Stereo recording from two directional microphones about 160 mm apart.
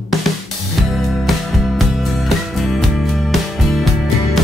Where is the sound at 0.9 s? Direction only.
Centre (ahead or behind).